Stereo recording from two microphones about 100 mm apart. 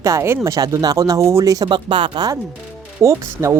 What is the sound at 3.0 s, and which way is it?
Speech, 30° right (ahead or behind).